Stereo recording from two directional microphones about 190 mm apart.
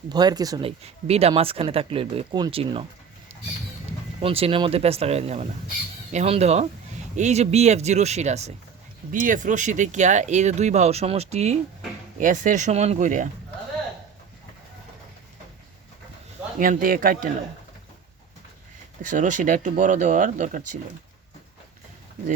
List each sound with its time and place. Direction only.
0.1 s speech: 20° right (ahead or behind)
0.8 s speech: 30° right (ahead or behind)
4.2 s speech: 30° right (ahead or behind)
16.6 s speech: 50° right (ahead or behind)
19.0 s speech: 40° right (ahead or behind)